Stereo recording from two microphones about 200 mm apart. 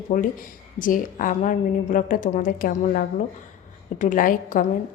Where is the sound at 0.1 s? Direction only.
40° left (ahead or behind).